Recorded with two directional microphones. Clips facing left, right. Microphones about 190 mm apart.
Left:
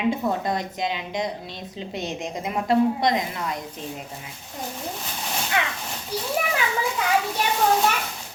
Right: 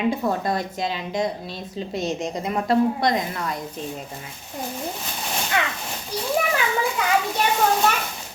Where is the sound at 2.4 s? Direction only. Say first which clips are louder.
Even; 15° left (ahead or behind).